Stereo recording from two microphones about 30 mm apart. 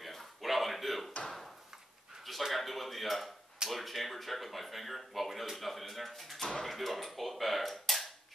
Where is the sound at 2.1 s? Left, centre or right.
Right.